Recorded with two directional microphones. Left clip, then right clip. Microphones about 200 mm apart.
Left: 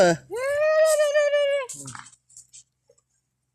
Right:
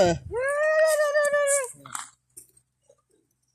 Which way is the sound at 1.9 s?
60° right (ahead or behind).